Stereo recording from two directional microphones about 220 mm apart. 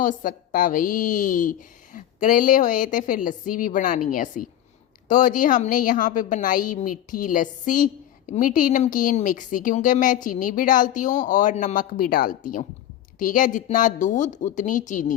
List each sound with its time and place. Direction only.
0.0 s speech: 35° left (ahead or behind)